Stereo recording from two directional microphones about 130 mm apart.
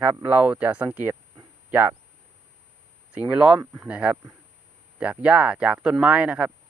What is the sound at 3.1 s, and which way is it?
Speech, 10° right (ahead or behind).